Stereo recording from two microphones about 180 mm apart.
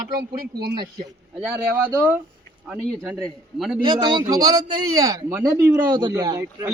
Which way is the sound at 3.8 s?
25° right (ahead or behind).